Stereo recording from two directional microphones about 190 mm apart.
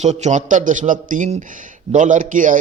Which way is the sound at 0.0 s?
35° right (ahead or behind).